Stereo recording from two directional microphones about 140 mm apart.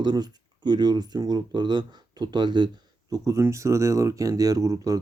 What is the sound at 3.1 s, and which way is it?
Speech, 20° right (ahead or behind).